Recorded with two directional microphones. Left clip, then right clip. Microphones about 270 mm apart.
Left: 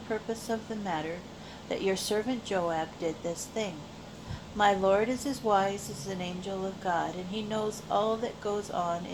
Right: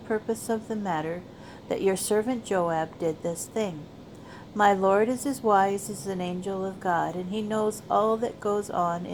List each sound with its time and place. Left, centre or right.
0.1 s a woman's voice: right